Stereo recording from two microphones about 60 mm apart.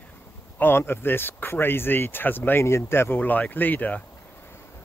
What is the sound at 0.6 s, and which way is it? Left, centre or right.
Speech, left.